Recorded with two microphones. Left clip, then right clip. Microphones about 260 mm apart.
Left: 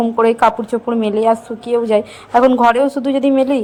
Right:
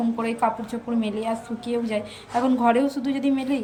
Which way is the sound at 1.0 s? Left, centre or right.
Centre.